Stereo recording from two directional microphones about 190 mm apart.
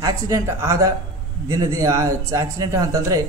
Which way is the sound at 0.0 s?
15° right (ahead or behind).